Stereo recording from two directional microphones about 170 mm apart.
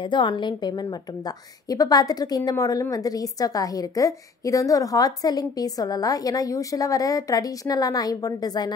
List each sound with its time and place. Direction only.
0.0 s a woman's voice: 30° left (ahead or behind)